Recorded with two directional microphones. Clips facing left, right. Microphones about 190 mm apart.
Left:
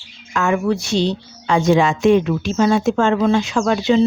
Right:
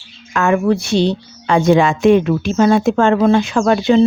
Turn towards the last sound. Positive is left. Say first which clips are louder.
# right 3 dB
turn(degrees=-55)  # may be behind; listen again after turning